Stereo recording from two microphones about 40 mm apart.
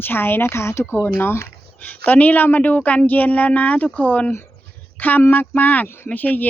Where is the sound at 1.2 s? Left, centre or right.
Left.